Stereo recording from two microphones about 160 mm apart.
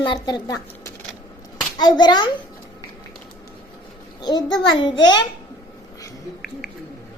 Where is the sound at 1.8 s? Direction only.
25° left (ahead or behind).